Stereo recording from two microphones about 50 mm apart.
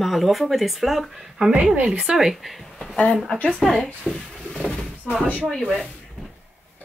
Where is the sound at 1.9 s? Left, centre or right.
Centre.